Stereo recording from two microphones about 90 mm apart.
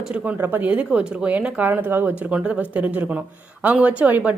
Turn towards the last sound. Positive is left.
turn(degrees=-20)  # may be behind; listen again after turning